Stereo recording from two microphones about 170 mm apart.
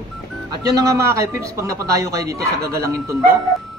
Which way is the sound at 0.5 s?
20° right (ahead or behind).